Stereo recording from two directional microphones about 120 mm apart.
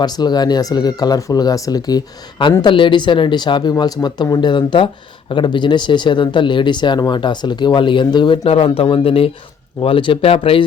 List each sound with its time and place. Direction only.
0.0 s a man's voice: 35° left (ahead or behind); by 10.6 s 50° left (ahead or behind)